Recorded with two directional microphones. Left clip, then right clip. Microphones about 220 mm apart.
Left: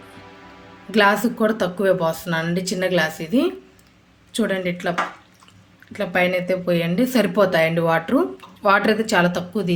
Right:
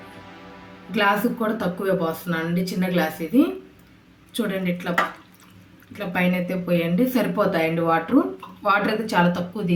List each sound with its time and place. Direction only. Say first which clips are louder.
0.9 s speech: left 4 dB; 50° left (ahead or behind)